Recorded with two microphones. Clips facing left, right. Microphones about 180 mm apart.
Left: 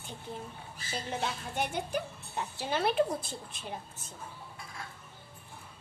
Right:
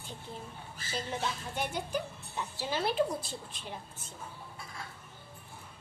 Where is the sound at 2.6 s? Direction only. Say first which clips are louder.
Left 2 dB; 55° left (ahead or behind).